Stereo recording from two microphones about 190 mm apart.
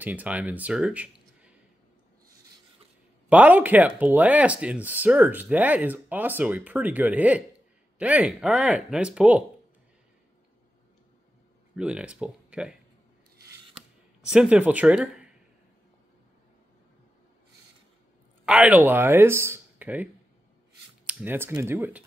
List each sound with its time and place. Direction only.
0.0 s speech: 10° right (ahead or behind)
3.3 s speech: 10° right (ahead or behind)
11.7 s speech: 5° right (ahead or behind)
14.2 s speech: 5° right (ahead or behind)
18.4 s speech: 5° right (ahead or behind)